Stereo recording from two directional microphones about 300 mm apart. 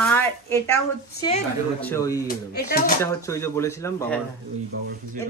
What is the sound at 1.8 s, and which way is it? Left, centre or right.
Speech, centre.